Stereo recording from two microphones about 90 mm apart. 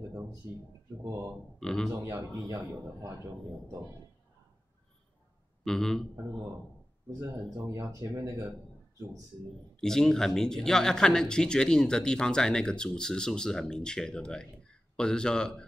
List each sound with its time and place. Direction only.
1.0 s speech: 35° right (ahead or behind)
1.6 s speech: 5° left (ahead or behind)
2.4 s speech: 40° right (ahead or behind)
5.6 s a man's voice: 5° left (ahead or behind)
7.6 s speech: 35° right (ahead or behind)
9.8 s speech: 5° left (ahead or behind)